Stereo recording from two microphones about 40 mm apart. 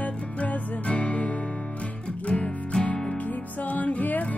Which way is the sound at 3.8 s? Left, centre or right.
Left.